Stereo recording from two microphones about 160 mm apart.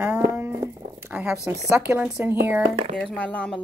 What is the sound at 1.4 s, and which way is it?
Speech, 20° right (ahead or behind).